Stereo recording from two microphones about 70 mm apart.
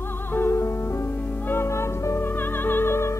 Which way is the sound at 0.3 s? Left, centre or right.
Left.